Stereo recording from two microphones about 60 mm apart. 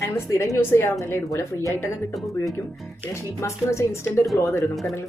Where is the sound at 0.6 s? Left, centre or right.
Left.